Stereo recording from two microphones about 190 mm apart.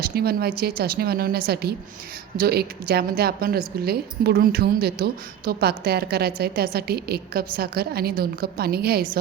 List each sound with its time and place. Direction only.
0.0 s a woman's voice: 55° right (ahead or behind)